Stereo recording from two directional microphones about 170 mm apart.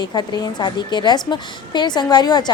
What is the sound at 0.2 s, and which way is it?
A woman's voice, 25° left (ahead or behind).